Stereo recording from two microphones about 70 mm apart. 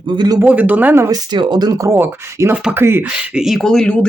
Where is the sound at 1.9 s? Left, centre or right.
Right.